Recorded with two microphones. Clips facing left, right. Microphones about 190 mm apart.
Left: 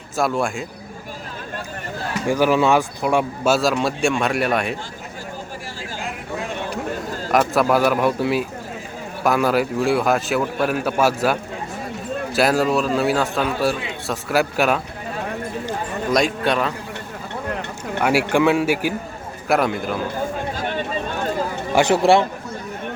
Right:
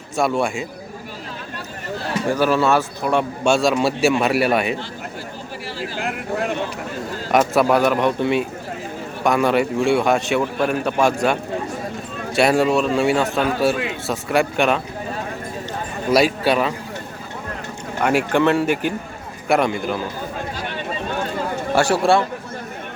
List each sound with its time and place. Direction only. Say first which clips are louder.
0.2 s a man's voice: right 1 dB; centre (ahead or behind)
2.3 s a man's voice: left 1 dB; 15° left (ahead or behind); by 4.8 s centre (ahead or behind)
6.0 s vehicle: right 5 dB; 65° right (ahead or behind)
7.3 s a man's voice: right 1 dB; centre (ahead or behind)
16.1 s a man's voice: right 3 dB; 5° right (ahead or behind)
18.0 s a man's voice: even; 5° left (ahead or behind)
21.8 s a man's voice: left 2 dB; 20° left (ahead or behind)